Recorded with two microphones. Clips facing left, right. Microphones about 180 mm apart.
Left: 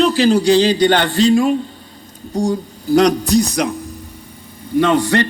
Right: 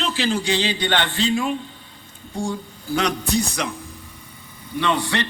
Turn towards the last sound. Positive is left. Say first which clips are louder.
# left 8 dB
turn(degrees=45)  # may be behind; listen again after turning